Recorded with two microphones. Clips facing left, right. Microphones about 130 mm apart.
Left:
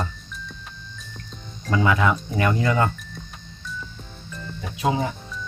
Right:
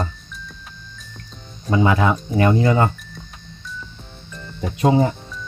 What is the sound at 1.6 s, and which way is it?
Speech, 25° right (ahead or behind).